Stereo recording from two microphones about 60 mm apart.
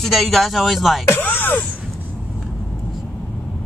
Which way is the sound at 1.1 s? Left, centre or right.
Left.